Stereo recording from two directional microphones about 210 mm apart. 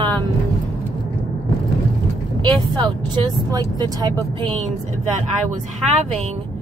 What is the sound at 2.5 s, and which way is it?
Speech, 20° right (ahead or behind).